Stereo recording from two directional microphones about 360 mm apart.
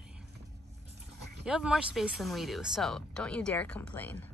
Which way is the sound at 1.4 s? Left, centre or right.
Centre.